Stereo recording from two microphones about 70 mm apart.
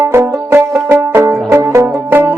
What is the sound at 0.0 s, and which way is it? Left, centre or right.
Music, right.